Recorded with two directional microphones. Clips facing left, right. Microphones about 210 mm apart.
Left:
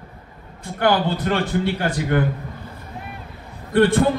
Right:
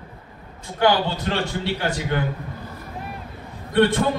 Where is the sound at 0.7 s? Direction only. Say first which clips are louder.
Left 1 dB; 55° left (ahead or behind).